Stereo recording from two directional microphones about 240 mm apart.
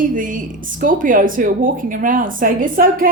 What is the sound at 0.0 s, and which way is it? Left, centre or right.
A woman's voice, right.